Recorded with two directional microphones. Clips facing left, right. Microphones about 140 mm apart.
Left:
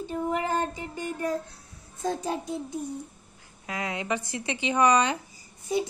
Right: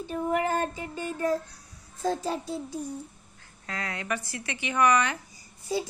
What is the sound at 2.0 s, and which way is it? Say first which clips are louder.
Speech: right 1 dB; 20° left (ahead or behind).